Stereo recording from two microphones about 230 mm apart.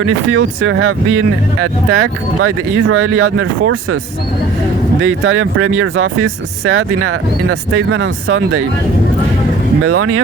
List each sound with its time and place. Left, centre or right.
0.0 s speech: right
4.9 s speech: right
9.8 s speech: right